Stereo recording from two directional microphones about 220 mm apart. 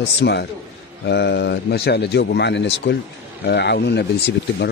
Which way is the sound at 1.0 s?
50° left (ahead or behind).